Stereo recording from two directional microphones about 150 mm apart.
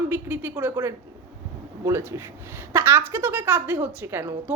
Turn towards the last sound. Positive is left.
turn(degrees=-15)  # may be behind; listen again after turning